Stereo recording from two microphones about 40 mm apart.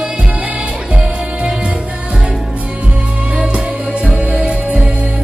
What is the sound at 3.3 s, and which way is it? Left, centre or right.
Music, right.